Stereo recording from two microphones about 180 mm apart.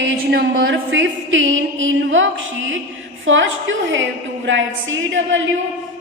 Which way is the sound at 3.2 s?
90° right.